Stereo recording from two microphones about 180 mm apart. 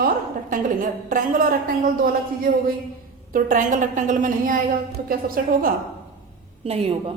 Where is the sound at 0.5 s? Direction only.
50° right (ahead or behind).